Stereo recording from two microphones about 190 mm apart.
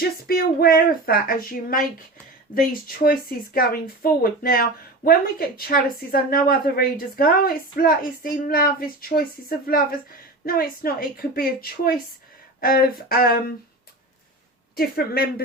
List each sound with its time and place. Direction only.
0.0 s a woman's voice: 50° left (ahead or behind)
14.8 s a woman's voice: 55° left (ahead or behind)